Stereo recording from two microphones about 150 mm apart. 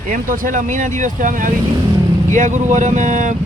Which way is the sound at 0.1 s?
65° right (ahead or behind).